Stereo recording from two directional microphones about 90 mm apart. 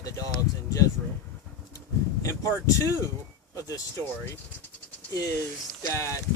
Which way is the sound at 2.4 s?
40° left (ahead or behind).